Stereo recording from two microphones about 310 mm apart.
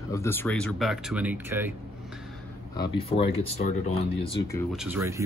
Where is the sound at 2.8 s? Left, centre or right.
Centre.